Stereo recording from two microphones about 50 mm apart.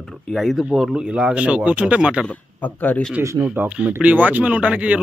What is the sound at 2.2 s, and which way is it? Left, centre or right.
Speech, left.